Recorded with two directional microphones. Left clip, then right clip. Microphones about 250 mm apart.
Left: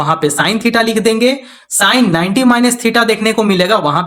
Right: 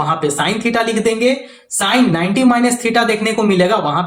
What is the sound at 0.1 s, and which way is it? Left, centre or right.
Speech, left.